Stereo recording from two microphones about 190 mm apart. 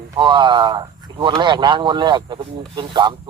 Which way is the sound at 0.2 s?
25° right (ahead or behind).